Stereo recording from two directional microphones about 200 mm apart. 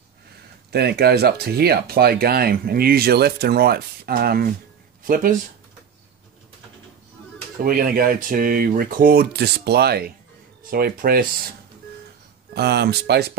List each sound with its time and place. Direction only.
0.7 s speech: 55° right (ahead or behind)
7.6 s speech: 45° right (ahead or behind)
12.5 s speech: 55° right (ahead or behind)